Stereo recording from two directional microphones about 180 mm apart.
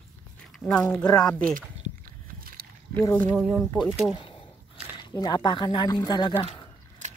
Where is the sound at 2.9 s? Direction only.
15° left (ahead or behind).